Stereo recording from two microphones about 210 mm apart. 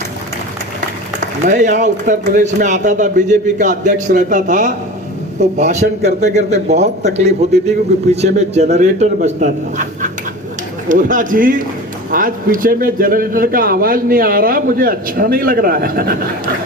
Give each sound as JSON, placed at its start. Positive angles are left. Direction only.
{"t": 1.2, "sound": "a man's voice", "side_deg": -35}
{"t": 5.8, "sound": "speech", "side_deg": -50}
{"t": 6.3, "sound": "a man's voice", "side_deg": -30}